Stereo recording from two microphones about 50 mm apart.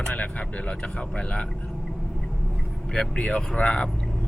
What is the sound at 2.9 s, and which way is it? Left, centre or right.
Speech, left.